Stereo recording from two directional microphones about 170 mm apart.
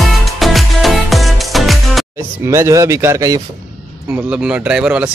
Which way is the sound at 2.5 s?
15° right (ahead or behind).